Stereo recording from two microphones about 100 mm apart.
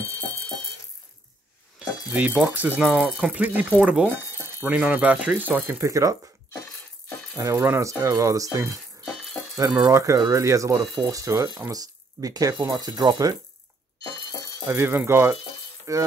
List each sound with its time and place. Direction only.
1.8 s speech: 15° right (ahead or behind)
2.8 s speech: 5° right (ahead or behind); by 6.1 s 30° right (ahead or behind)
7.3 s speech: 35° right (ahead or behind)
7.6 s speech: 25° right (ahead or behind)
9.0 s rattle: 5° left (ahead or behind)
9.8 s speech: 35° right (ahead or behind)
14.7 s speech: 25° right (ahead or behind)